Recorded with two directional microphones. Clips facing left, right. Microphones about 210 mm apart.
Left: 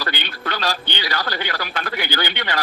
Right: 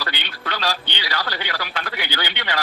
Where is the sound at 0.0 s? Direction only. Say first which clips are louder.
Left 3 dB; 45° left (ahead or behind).